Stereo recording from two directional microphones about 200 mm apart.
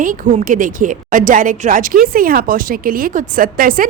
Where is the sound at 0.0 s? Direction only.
40° right (ahead or behind).